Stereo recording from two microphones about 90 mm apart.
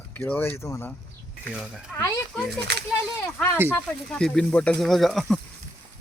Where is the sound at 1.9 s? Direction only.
10° left (ahead or behind).